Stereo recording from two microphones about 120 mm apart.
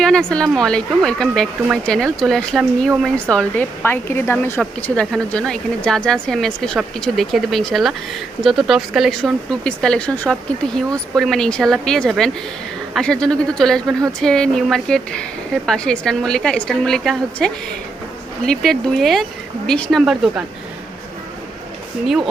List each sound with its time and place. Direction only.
0.0 s speech: 5° left (ahead or behind)
4.8 s speech: 10° left (ahead or behind)